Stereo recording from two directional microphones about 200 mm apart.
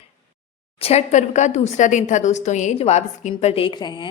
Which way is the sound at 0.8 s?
30° left (ahead or behind).